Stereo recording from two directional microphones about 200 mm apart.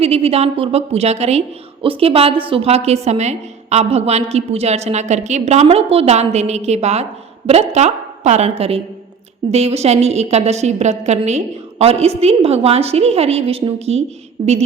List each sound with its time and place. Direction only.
0.0 s speech: 30° right (ahead or behind)